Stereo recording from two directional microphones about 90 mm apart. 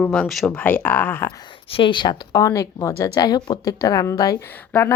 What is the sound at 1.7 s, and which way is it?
Speech, 65° left (ahead or behind).